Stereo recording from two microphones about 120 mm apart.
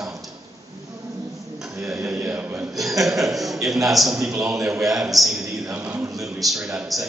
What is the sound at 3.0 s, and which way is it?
A man's voice, centre (ahead or behind).